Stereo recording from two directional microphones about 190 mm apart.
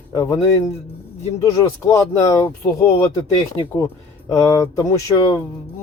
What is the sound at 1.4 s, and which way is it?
A man's voice, 20° left (ahead or behind).